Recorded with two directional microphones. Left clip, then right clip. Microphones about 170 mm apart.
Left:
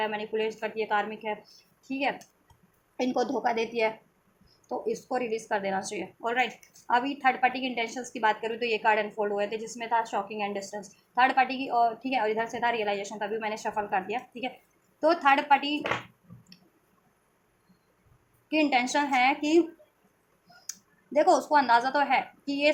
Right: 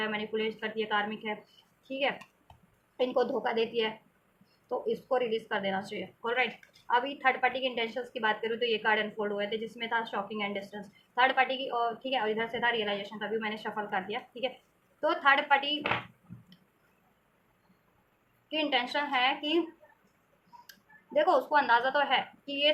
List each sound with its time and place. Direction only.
0.0 s a woman's voice: 40° left (ahead or behind)
5.0 s a woman's voice: 40° left (ahead or behind)
18.5 s speech: 50° left (ahead or behind)
20.7 s speech: 40° left (ahead or behind)